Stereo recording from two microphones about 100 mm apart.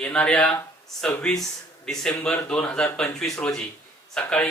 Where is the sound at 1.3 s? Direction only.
5° left (ahead or behind).